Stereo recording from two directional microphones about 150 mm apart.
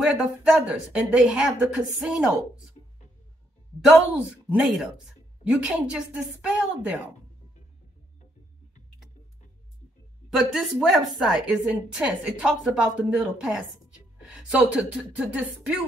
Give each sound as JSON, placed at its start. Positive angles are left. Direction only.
{"t": 0.0, "sound": "speech", "side_deg": -5}
{"t": 3.8, "sound": "a woman's voice", "side_deg": -5}
{"t": 10.3, "sound": "speech", "side_deg": 0}